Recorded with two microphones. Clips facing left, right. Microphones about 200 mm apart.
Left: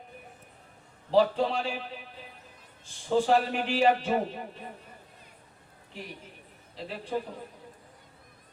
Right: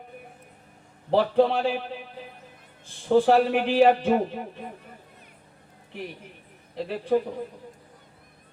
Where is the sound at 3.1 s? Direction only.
55° right (ahead or behind).